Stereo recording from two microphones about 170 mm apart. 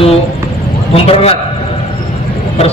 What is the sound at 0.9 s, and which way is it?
Speech, 35° left (ahead or behind).